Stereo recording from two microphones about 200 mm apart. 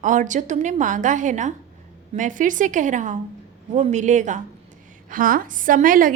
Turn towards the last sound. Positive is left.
turn(degrees=-45)  # may be behind; listen again after turning